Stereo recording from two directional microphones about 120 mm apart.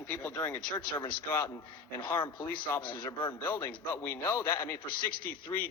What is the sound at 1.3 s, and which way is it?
Speech, 25° left (ahead or behind).